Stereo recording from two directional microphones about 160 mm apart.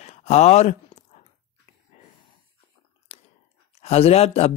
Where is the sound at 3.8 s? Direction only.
40° left (ahead or behind).